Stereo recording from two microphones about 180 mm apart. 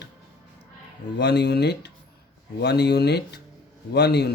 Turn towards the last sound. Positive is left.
turn(degrees=65)  # may be behind; listen again after turning